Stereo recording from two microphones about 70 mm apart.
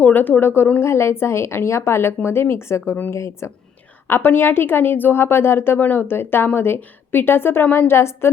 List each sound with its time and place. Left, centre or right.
0.0 s a woman's voice: left
2.9 s a woman's voice: left
3.2 s speech: left
4.0 s a woman's voice: left